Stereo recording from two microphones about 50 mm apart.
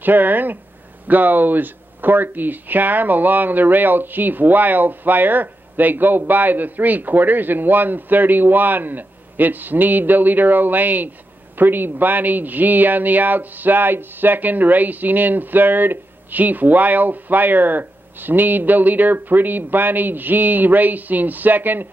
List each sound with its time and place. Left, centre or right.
0.0 s a man's voice: right